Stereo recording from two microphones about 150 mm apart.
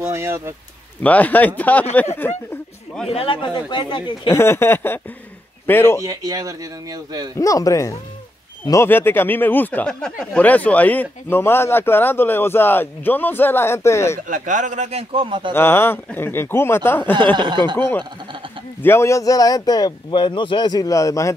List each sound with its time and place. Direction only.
0.0 s speech: 20° right (ahead or behind)
1.0 s speech: 10° left (ahead or behind)
3.1 s speech: 35° left (ahead or behind)
4.3 s speech: 15° left (ahead or behind)
6.0 s speech: 25° right (ahead or behind)
7.3 s speech: 20° left (ahead or behind)
14.2 s a man's voice: 60° right (ahead or behind); by 15.5 s 35° right (ahead or behind)
15.5 s speech: 15° left (ahead or behind)
17.1 s chuckle: 30° right (ahead or behind)
17.7 s speech: 15° left (ahead or behind)